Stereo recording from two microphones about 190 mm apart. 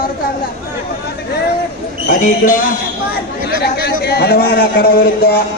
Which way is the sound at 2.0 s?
45° left (ahead or behind).